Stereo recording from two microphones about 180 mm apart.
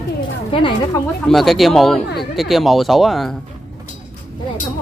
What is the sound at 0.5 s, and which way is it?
Speech, 30° left (ahead or behind).